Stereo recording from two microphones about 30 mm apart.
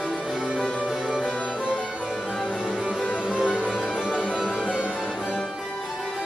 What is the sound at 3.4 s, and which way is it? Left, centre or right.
Music, left.